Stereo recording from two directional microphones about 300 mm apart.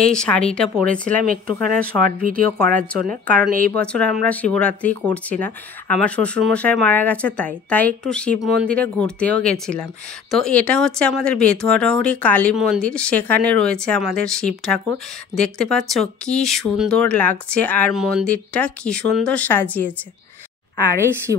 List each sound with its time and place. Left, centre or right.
0.0 s speech: centre
1.2 s speech: right
3.7 s speech: centre
21.3 s speech: right